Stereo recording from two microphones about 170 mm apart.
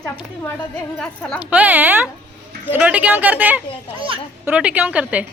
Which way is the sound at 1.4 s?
10° right (ahead or behind).